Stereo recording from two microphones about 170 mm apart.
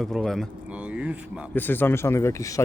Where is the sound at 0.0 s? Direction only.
Centre (ahead or behind).